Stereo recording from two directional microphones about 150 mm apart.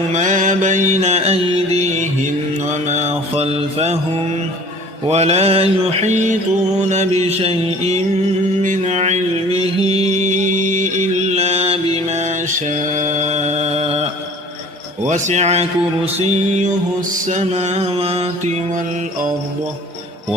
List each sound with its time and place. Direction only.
0.1 s mantra: 55° right (ahead or behind)
5.0 s music: 45° right (ahead or behind)
8.6 s mantra: 55° right (ahead or behind)
9.6 s music: 45° right (ahead or behind)
10.2 s mantra: 55° right (ahead or behind)
15.0 s speech: 55° right (ahead or behind)
16.1 s music: 45° right (ahead or behind)